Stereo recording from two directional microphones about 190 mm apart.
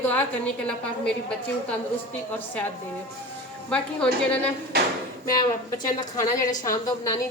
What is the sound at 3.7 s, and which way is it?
Speech, 5° left (ahead or behind).